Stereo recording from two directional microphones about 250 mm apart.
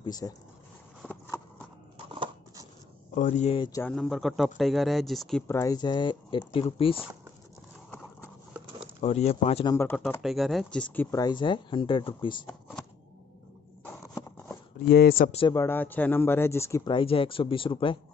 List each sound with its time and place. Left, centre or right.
0.0 s speech: centre
1.0 s a sound: centre
2.0 s a sound: centre
3.2 s speech: left
3.8 s speech: centre; by 7.0 s left
9.0 s speech: left
9.8 s speech: centre
12.4 s a sound: centre
14.9 s speech: left
15.3 s speech: centre